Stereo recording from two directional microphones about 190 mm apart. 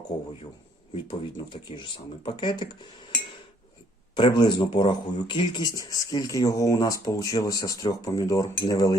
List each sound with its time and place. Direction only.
0.9 s speech: 25° left (ahead or behind)
4.1 s speech: 25° left (ahead or behind)